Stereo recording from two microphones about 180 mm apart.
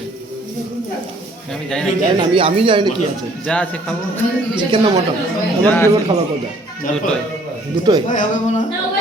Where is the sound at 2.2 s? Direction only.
30° right (ahead or behind).